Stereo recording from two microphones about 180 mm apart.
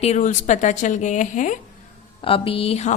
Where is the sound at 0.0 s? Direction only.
40° left (ahead or behind).